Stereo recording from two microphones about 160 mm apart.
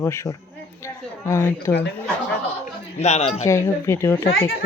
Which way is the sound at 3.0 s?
45° left (ahead or behind).